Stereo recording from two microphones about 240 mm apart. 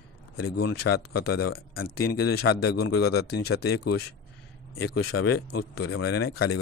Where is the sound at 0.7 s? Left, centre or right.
Left.